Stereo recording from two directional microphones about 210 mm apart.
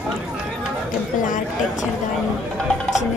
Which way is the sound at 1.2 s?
40° left (ahead or behind).